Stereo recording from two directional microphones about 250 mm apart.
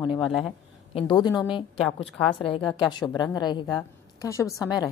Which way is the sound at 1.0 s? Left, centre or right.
Centre.